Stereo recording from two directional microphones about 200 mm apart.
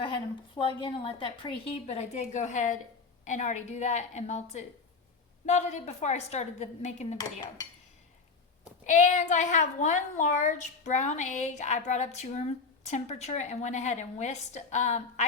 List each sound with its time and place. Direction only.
0.6 s a woman's voice: 25° left (ahead or behind)
7.2 s a woman's voice: 20° left (ahead or behind)
8.9 s a woman's voice: 40° left (ahead or behind)